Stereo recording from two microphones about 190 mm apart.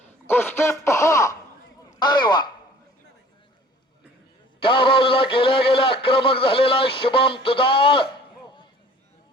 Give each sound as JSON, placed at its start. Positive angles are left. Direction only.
{"t": 0.3, "sound": "a man's voice", "side_deg": 10}
{"t": 4.6, "sound": "speech", "side_deg": 25}
{"t": 8.4, "sound": "a sound", "side_deg": 25}